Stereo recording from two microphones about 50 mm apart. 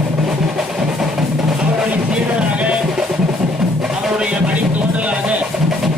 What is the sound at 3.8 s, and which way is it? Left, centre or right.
Music, centre.